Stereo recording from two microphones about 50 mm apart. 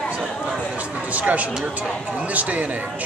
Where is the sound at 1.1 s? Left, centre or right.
Right.